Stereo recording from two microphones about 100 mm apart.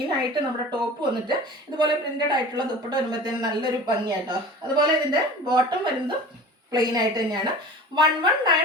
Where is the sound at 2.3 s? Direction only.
45° right (ahead or behind).